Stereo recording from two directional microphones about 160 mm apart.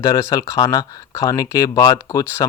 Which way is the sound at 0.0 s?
20° left (ahead or behind).